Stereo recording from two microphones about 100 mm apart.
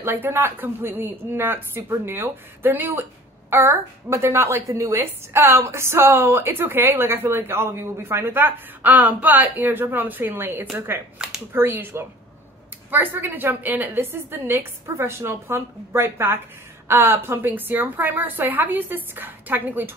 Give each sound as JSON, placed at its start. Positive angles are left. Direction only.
{"t": 0.0, "sound": "speech", "side_deg": -25}